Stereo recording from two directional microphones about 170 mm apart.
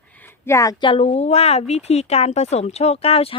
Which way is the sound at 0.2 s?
15° left (ahead or behind).